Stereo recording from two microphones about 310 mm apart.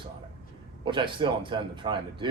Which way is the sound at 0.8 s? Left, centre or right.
Centre.